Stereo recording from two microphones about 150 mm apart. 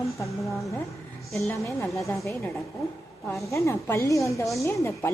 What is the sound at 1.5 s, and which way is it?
Speech, 20° left (ahead or behind).